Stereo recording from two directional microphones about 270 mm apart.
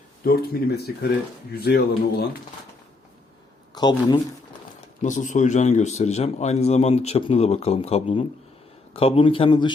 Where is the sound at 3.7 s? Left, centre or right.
Centre.